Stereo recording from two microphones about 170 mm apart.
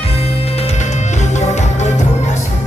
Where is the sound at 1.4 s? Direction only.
45° left (ahead or behind).